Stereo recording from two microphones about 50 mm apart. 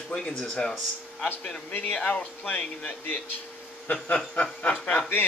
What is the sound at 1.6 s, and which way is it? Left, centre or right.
Speech, left.